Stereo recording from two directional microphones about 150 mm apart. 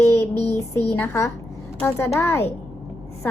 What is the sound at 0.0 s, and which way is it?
Child singing, 20° left (ahead or behind).